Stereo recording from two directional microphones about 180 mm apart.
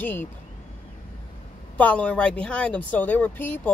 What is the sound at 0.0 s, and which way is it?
Speech, 10° left (ahead or behind).